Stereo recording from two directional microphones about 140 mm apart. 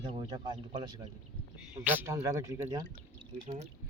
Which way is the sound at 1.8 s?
15° right (ahead or behind).